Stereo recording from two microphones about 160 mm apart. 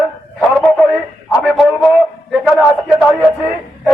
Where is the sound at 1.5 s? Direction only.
Centre (ahead or behind).